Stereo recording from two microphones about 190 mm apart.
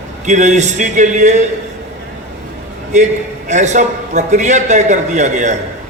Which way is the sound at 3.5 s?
40° right (ahead or behind).